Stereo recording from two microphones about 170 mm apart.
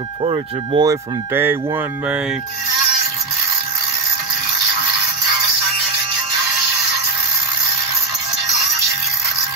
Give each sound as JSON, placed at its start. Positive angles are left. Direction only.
{"t": 0.2, "sound": "speech", "side_deg": -35}
{"t": 0.8, "sound": "speech", "side_deg": -10}